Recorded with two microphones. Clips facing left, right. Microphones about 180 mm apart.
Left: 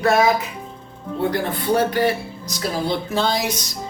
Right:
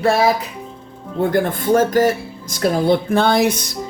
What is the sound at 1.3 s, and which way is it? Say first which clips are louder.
Speech: right 6 dB; 50° right (ahead or behind).